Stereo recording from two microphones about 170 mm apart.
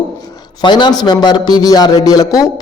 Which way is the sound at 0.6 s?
25° left (ahead or behind).